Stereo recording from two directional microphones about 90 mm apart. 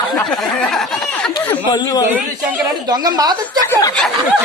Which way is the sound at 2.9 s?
45° right (ahead or behind).